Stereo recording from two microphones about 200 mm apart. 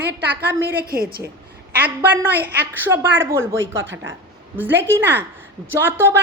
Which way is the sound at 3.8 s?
70° right (ahead or behind).